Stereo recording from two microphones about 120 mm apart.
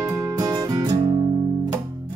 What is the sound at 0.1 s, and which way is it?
Music, 30° right (ahead or behind).